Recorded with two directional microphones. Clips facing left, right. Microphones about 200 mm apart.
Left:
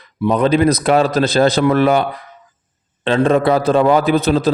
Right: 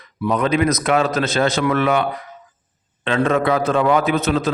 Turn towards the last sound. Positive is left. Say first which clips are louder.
# left 4 dB
turn(degrees=35)  # may be behind; listen again after turning